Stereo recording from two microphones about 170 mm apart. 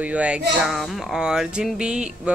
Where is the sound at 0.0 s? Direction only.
5° right (ahead or behind).